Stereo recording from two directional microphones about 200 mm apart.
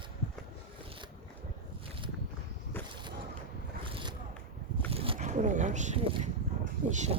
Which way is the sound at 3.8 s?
25° right (ahead or behind).